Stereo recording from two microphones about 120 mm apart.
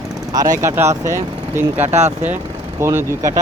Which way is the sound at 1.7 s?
65° right (ahead or behind).